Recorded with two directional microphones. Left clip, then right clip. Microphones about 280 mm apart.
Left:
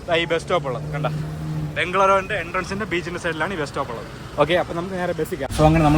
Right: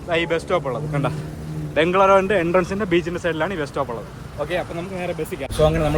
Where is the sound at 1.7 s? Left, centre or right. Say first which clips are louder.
Right 5 dB; centre.